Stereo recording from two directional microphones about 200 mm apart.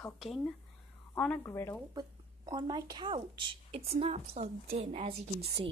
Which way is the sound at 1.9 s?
20° right (ahead or behind).